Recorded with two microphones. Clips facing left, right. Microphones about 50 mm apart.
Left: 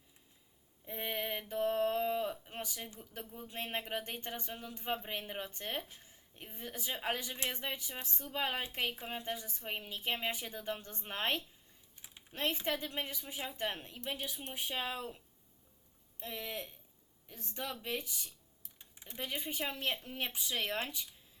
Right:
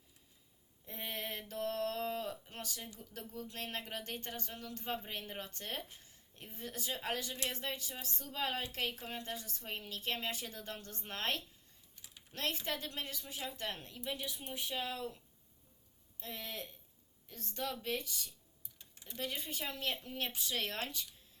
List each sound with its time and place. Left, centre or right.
0.9 s a sound: left
8.0 s a woman's voice: left
16.2 s a woman's voice: left
17.2 s a woman's voice: centre